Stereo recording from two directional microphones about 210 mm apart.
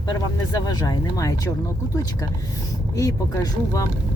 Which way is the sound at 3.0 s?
15° left (ahead or behind).